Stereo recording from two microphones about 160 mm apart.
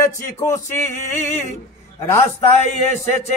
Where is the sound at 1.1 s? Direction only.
45° left (ahead or behind).